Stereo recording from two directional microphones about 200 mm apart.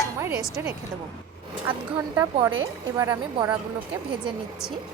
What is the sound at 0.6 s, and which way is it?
Speech, 10° right (ahead or behind).